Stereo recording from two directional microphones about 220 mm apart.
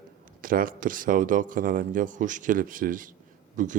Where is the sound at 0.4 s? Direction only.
40° right (ahead or behind).